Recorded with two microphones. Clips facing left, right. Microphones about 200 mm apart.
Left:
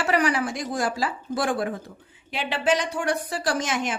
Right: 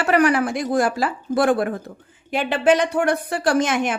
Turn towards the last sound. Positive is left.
turn(degrees=-60)  # may be behind; listen again after turning